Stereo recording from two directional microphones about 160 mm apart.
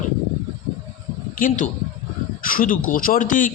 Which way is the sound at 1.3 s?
55° left (ahead or behind).